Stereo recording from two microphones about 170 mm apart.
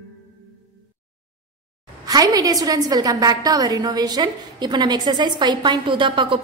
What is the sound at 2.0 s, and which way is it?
A woman's voice, 25° right (ahead or behind).